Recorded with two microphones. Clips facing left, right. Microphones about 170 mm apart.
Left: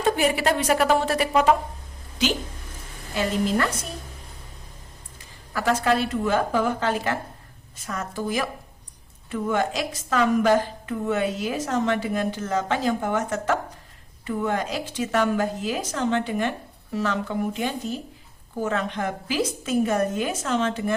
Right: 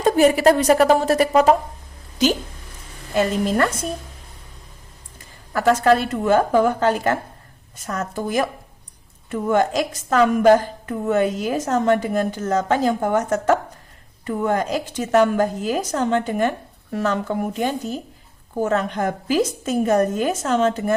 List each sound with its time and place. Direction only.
0.0 s a woman's voice: 40° right (ahead or behind)
5.5 s a woman's voice: 45° right (ahead or behind)